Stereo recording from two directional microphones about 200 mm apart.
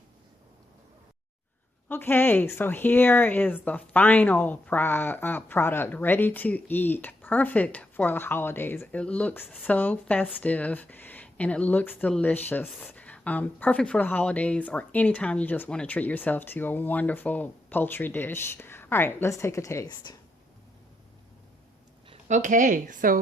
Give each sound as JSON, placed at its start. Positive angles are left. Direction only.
{"t": 1.9, "sound": "speech", "side_deg": 10}
{"t": 22.1, "sound": "a woman's voice", "side_deg": -40}